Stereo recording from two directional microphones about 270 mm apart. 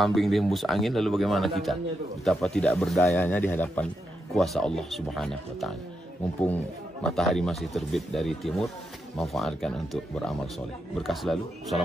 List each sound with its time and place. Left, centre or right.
0.0 s speech: centre
11.0 s speech: centre